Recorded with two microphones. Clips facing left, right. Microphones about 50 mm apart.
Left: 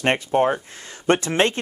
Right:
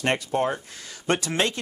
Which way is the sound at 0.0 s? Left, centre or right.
Left.